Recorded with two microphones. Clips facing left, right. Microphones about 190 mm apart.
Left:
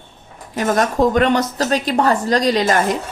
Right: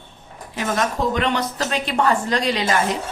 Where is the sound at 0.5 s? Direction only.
45° left (ahead or behind).